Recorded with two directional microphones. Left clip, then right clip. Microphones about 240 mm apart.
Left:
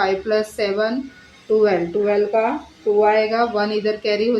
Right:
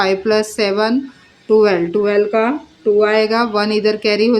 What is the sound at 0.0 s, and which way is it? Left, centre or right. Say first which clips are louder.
A woman's voice: right 4 dB; right.